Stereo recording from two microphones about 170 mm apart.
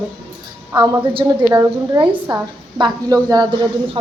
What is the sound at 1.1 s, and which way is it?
A woman's voice, 20° right (ahead or behind).